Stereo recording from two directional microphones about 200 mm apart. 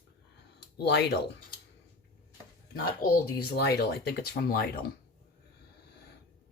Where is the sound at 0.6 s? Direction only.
55° left (ahead or behind).